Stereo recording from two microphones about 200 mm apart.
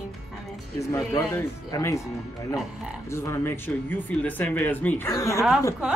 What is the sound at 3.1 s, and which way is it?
Speech, 15° left (ahead or behind).